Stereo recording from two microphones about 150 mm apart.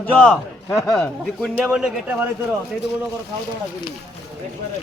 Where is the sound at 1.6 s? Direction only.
5° right (ahead or behind).